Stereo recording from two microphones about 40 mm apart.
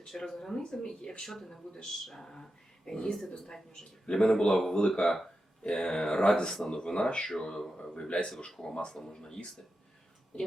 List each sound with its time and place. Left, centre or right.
0.0 s speech: centre
7.3 s speech: centre